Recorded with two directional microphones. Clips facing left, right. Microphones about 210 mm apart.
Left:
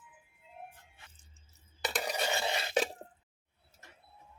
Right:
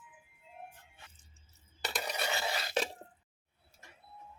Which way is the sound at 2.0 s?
20° left (ahead or behind).